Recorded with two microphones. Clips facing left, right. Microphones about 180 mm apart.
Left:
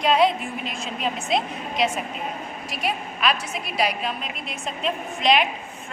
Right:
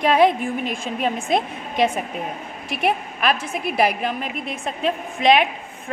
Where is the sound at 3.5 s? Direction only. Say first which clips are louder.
Right 5 dB; 55° right (ahead or behind).